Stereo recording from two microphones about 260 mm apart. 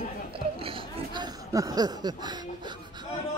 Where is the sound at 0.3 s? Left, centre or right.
Right.